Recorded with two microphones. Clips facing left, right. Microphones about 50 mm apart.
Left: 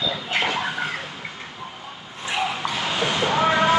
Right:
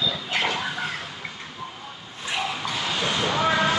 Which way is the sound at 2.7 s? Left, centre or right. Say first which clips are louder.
Left 2 dB; centre.